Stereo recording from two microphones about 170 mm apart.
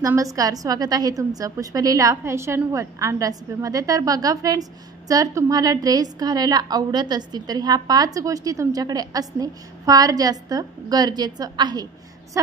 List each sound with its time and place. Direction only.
0.0 s a woman's voice: 20° right (ahead or behind)